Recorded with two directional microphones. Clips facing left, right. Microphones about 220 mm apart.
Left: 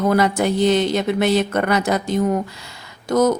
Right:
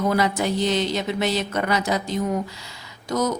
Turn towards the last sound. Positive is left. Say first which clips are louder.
# left 7 dB
turn(degrees=55)  # may be behind; listen again after turning